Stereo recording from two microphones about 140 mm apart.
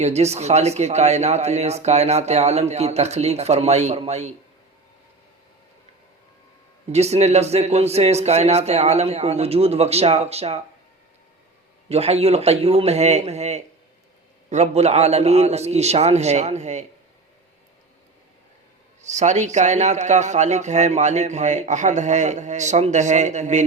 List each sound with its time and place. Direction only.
0.0 s speech: 50° right (ahead or behind)
6.9 s speech: 50° right (ahead or behind)
11.9 s speech: 50° right (ahead or behind)
19.0 s speech: 55° right (ahead or behind)